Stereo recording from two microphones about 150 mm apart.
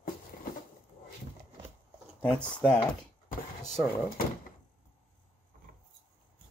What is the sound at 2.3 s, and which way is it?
Speech, 5° left (ahead or behind).